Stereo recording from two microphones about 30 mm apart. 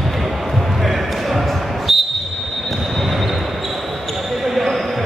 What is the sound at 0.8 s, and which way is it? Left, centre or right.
Basketball bounce, centre.